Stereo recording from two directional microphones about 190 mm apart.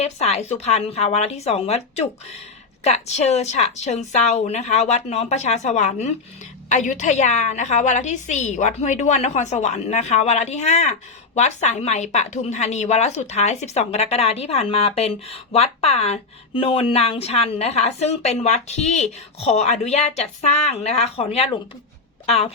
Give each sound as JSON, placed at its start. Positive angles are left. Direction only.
{"t": 0.0, "sound": "a woman's voice", "side_deg": 35}
{"t": 2.8, "sound": "a woman's voice", "side_deg": 35}